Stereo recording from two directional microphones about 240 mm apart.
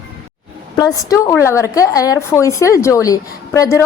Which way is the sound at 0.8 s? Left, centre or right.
Centre.